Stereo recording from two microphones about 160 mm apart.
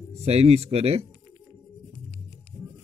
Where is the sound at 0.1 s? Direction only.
40° right (ahead or behind).